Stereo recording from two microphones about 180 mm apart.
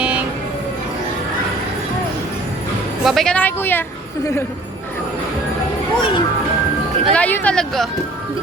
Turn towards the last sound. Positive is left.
turn(degrees=5)  # may be behind; listen again after turning